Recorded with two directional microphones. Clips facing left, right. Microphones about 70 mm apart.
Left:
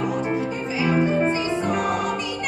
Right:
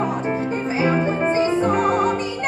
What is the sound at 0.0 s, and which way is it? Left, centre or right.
Music, right.